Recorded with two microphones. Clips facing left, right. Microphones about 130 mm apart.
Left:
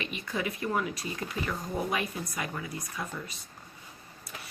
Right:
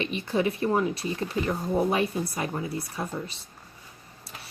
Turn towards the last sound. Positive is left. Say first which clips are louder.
# right 5 dB
turn(degrees=-30)  # may be behind; listen again after turning